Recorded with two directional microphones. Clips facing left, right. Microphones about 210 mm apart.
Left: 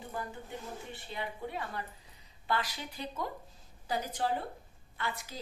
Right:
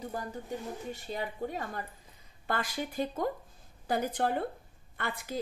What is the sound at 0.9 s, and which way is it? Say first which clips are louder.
A woman's voice: right 4 dB; 40° right (ahead or behind).